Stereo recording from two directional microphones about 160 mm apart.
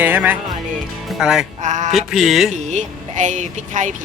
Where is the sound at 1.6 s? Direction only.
50° right (ahead or behind).